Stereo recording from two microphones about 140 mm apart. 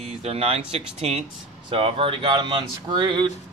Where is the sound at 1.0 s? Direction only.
50° right (ahead or behind).